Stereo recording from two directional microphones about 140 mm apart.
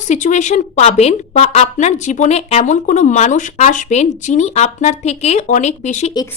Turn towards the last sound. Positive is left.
turn(degrees=55)  # may be behind; listen again after turning